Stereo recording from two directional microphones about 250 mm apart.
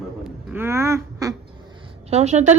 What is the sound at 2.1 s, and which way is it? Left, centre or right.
Speech, right.